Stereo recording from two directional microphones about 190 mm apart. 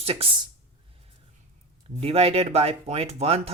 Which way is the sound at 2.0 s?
30° right (ahead or behind).